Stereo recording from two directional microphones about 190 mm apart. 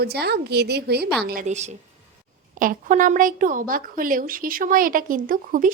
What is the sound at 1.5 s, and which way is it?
A woman's voice, 35° right (ahead or behind).